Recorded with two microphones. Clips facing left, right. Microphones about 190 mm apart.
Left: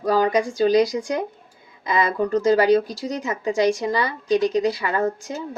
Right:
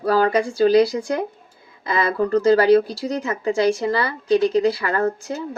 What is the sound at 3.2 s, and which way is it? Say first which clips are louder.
Speech: right 1 dB; 15° left (ahead or behind).